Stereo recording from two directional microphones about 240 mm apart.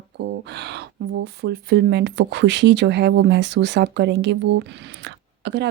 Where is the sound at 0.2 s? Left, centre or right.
Right.